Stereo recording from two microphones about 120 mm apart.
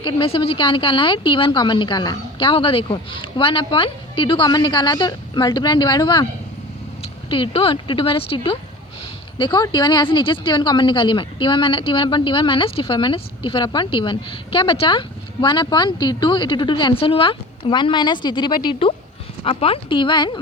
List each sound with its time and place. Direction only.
0.0 s speech: 45° left (ahead or behind)
2.5 s a woman's voice: 50° left (ahead or behind)